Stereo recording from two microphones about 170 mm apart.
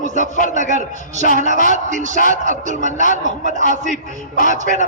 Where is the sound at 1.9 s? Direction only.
45° right (ahead or behind).